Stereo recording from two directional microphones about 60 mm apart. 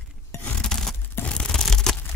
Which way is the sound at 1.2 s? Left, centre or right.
Left.